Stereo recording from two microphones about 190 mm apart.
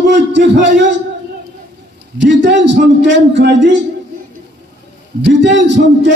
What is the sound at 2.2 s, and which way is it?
A man's voice, 70° right (ahead or behind).